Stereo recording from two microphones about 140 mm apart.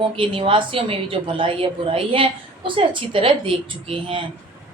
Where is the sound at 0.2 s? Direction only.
40° right (ahead or behind).